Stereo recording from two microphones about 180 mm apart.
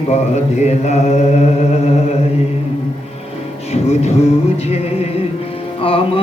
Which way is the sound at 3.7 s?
35° left (ahead or behind).